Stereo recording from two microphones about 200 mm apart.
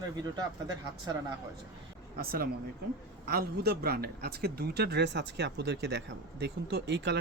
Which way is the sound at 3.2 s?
50° right (ahead or behind).